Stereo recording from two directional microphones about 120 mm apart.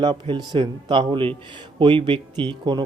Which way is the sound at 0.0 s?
40° right (ahead or behind).